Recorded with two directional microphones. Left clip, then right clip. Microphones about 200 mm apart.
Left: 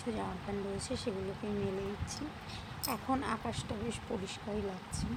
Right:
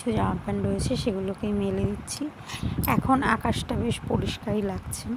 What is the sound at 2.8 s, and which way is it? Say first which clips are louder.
Speech: right 12 dB; 25° right (ahead or behind).